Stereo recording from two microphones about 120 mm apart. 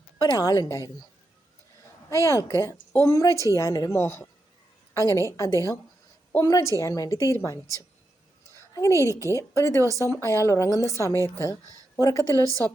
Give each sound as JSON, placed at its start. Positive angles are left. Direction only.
{"t": 0.2, "sound": "a woman's voice", "side_deg": 30}
{"t": 2.0, "sound": "a woman's voice", "side_deg": 25}
{"t": 8.7, "sound": "a woman's voice", "side_deg": 25}
{"t": 9.8, "sound": "speech", "side_deg": -25}
{"t": 10.1, "sound": "a woman's voice", "side_deg": 25}